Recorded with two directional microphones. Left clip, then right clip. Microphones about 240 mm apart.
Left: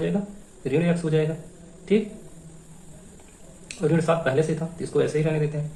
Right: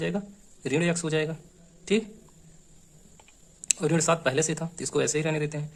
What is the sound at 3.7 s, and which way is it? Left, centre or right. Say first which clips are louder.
Speech: left 2 dB; right.